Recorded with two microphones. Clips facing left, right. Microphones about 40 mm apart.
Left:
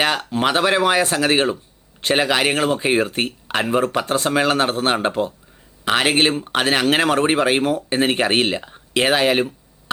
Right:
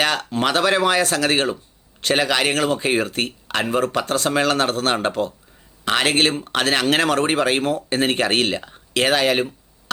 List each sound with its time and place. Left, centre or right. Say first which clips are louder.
0.3 s speech: left 1 dB; centre
3.1 s speech: left 1 dB; left